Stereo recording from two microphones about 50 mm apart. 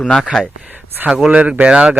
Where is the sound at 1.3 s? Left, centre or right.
Right.